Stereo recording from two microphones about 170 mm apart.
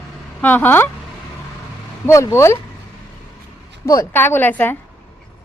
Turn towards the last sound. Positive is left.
turn(degrees=10)  # may be behind; listen again after turning